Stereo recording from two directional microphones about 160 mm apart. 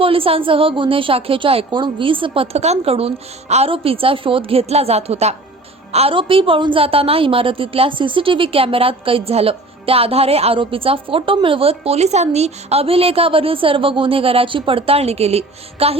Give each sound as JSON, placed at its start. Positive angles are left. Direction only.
{"t": 0.0, "sound": "a woman's voice", "side_deg": -35}